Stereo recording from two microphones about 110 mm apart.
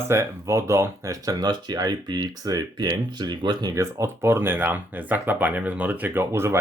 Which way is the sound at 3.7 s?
25° right (ahead or behind).